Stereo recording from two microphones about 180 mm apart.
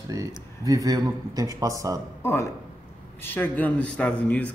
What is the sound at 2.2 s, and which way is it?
Speech, 15° left (ahead or behind).